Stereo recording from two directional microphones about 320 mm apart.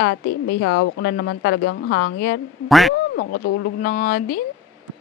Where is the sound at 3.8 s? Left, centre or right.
Left.